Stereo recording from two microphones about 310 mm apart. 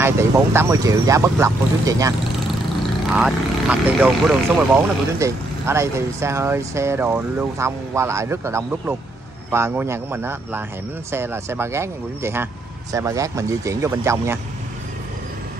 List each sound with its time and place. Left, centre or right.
0.0 s speech: centre